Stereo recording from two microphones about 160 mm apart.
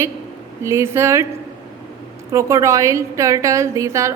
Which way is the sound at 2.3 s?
20° right (ahead or behind).